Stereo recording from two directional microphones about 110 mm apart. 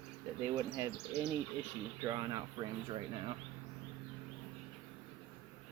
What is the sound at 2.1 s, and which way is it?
Speech, 35° right (ahead or behind).